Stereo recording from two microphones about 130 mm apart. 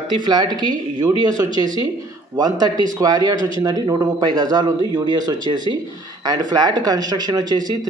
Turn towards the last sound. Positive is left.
turn(degrees=-30)  # may be behind; listen again after turning